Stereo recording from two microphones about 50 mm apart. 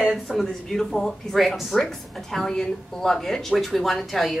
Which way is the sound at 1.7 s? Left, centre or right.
Centre.